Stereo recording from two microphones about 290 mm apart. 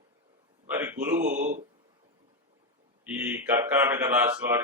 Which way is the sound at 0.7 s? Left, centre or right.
Centre.